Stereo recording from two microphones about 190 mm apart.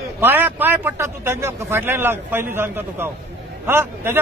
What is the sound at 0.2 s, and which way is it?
A man's voice, 10° right (ahead or behind).